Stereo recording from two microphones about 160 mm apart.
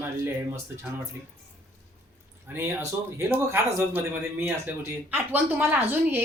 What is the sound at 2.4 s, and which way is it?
A man's voice, 15° right (ahead or behind).